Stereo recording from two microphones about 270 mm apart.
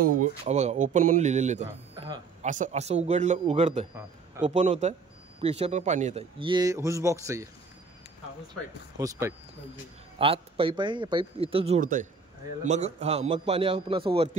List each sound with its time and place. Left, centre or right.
0.0 s a man's voice: right
2.5 s a man's voice: right; by 7.4 s centre
8.9 s a man's voice: centre